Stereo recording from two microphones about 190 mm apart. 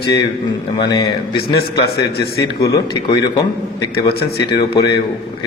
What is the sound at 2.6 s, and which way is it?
Speech, 20° left (ahead or behind).